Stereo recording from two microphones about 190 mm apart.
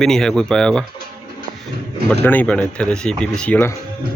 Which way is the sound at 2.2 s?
10° left (ahead or behind).